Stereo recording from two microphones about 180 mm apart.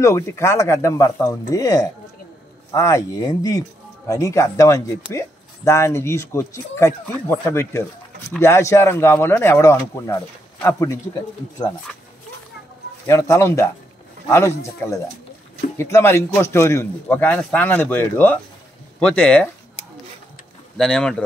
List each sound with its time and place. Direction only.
0.0 s speech: 15° left (ahead or behind)
13.0 s speech: 15° left (ahead or behind)
20.7 s speech: 5° left (ahead or behind)